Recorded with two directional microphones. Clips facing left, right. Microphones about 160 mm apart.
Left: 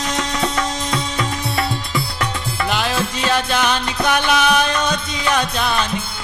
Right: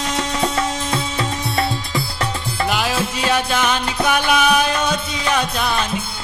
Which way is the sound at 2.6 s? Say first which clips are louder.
Even; 5° right (ahead or behind).